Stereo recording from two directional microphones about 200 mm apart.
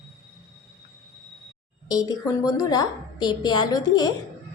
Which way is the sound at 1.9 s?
20° left (ahead or behind).